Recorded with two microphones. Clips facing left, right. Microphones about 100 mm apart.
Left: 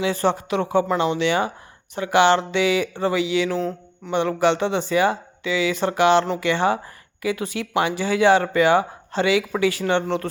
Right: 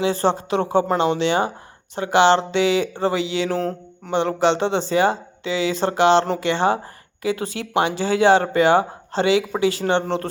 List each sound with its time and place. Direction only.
0.0 s speech: 30° right (ahead or behind)
4.1 s speech: 30° right (ahead or behind)